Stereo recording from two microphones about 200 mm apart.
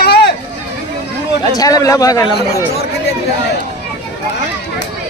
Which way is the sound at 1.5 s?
20° left (ahead or behind).